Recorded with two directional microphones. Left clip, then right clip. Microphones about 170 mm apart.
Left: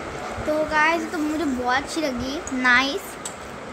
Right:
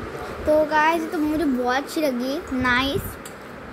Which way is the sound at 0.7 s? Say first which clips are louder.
Right 1 dB; 20° right (ahead or behind).